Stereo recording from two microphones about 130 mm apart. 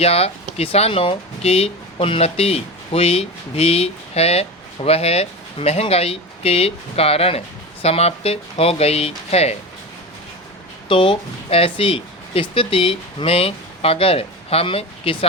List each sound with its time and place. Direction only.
0.0 s speech: 50° left (ahead or behind)
10.8 s speech: 40° left (ahead or behind)